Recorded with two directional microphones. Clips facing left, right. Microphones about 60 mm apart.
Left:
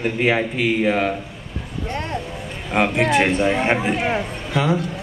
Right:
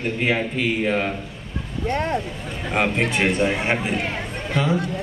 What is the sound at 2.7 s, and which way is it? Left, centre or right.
Speech, centre.